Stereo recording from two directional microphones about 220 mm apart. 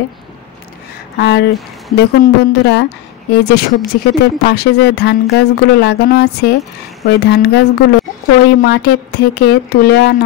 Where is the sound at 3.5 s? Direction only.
50° left (ahead or behind).